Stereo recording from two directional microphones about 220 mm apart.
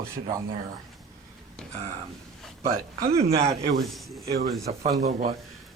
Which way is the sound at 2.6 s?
40° right (ahead or behind).